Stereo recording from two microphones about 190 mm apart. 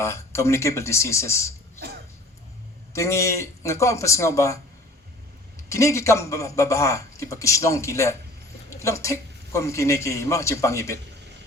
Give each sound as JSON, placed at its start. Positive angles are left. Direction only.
{"t": 0.0, "sound": "a man's voice", "side_deg": 15}
{"t": 2.9, "sound": "a man's voice", "side_deg": 15}
{"t": 5.6, "sound": "a man's voice", "side_deg": 15}